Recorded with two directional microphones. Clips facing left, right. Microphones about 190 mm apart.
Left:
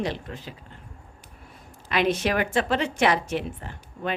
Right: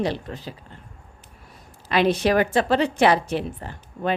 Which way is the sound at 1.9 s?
35° right (ahead or behind).